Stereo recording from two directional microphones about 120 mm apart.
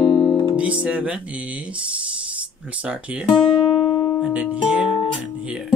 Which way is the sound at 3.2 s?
45° left (ahead or behind).